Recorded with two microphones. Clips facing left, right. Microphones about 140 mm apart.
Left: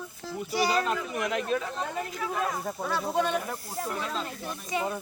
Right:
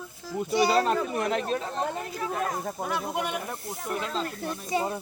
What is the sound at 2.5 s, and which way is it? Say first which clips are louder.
Speech: right 1 dB; 20° right (ahead or behind).